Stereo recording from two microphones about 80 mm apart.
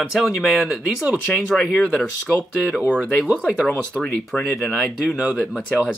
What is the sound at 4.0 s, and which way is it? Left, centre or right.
Speech, centre.